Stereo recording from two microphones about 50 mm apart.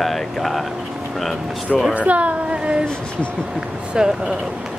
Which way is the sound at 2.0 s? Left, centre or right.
Right.